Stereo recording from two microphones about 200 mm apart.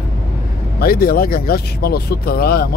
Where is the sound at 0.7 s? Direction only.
50° left (ahead or behind).